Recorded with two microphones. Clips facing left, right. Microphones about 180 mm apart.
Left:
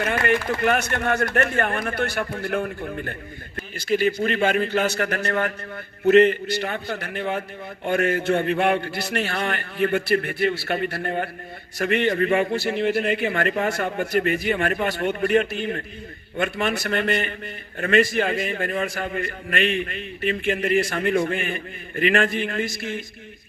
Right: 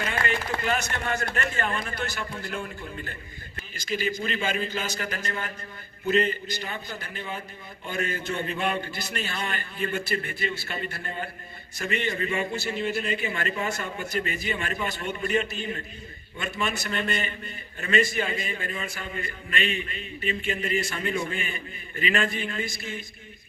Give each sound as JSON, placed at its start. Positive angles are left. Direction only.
{"t": 0.0, "sound": "a man's voice", "side_deg": 55}